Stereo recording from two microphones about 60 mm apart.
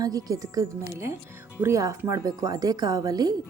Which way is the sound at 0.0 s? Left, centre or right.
Right.